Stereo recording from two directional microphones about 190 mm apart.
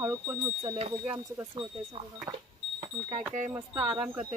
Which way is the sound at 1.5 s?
30° right (ahead or behind).